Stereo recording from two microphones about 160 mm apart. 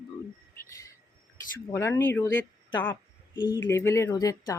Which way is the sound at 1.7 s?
15° left (ahead or behind).